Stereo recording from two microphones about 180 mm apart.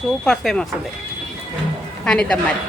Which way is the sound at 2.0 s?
5° left (ahead or behind).